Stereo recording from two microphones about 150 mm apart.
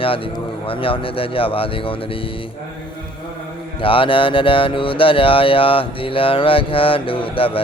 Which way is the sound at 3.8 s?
35° left (ahead or behind).